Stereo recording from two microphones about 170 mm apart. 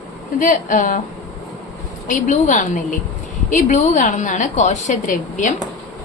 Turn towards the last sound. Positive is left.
turn(degrees=45)  # may be behind; listen again after turning